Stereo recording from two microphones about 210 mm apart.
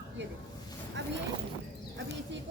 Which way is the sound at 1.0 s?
55° right (ahead or behind).